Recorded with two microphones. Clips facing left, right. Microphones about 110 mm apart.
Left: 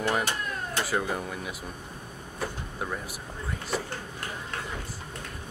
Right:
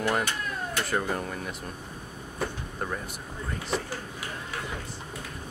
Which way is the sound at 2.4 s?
5° left (ahead or behind).